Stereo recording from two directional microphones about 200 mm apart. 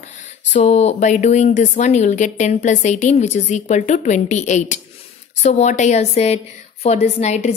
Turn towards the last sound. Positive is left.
turn(degrees=35)  # may be behind; listen again after turning